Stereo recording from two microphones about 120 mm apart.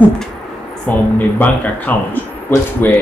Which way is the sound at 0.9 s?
10° left (ahead or behind).